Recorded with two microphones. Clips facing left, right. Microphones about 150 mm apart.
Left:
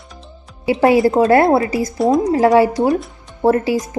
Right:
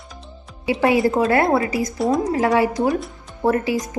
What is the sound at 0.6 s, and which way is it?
Speech, 35° left (ahead or behind).